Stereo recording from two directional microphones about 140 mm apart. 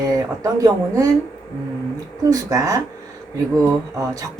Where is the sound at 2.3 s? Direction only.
25° right (ahead or behind).